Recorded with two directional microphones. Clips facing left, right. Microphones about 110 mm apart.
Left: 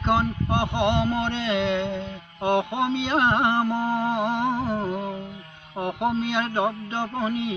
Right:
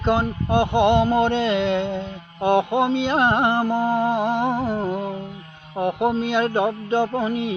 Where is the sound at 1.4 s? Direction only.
45° right (ahead or behind).